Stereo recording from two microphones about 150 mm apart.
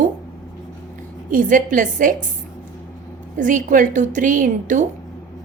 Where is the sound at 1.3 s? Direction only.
65° right (ahead or behind).